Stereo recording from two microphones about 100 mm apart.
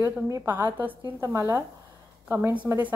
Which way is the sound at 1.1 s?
30° right (ahead or behind).